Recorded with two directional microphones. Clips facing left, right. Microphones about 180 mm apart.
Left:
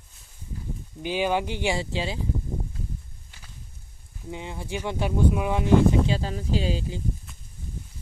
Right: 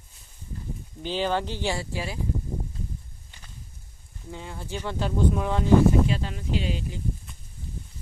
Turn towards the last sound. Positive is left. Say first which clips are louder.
# left 2 dB
turn(degrees=30)  # may be behind; listen again after turning